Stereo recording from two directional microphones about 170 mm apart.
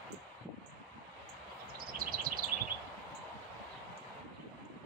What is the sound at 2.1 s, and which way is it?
Bird, 60° right (ahead or behind).